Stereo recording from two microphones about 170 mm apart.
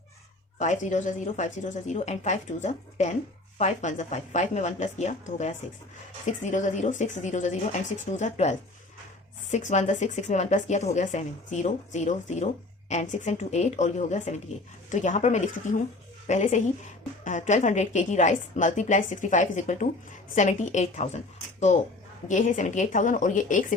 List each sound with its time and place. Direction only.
0.6 s a woman's voice: 45° left (ahead or behind)